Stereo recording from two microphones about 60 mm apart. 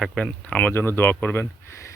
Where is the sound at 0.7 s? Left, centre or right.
Left.